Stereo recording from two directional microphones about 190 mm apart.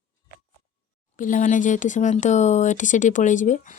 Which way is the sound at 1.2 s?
45° left (ahead or behind).